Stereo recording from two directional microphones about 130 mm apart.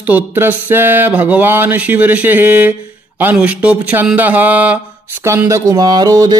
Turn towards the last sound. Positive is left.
turn(degrees=-30)  # may be behind; listen again after turning